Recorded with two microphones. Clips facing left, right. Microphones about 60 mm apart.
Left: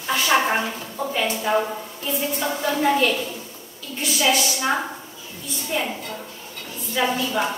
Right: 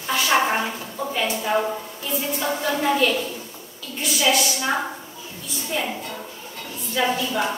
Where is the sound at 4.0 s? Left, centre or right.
Centre.